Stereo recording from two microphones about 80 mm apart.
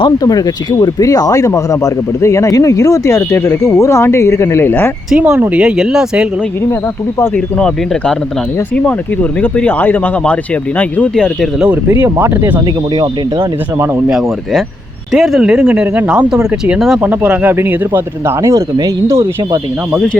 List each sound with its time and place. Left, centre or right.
0.2 s speech: left
5.1 s speech: centre
7.3 s speech: centre
11.1 s speech: centre
11.9 s speech: right
12.3 s speech: right
14.1 s speech: centre
15.6 s speech: centre
17.0 s speech: centre
17.5 s speech: right